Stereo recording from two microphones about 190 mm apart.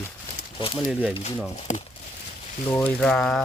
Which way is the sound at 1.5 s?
35° left (ahead or behind).